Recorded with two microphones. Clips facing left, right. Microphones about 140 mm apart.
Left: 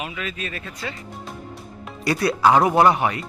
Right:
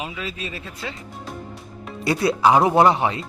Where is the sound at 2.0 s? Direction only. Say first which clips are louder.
Even; 25° right (ahead or behind).